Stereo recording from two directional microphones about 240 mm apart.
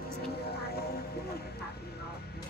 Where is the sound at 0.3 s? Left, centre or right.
Left.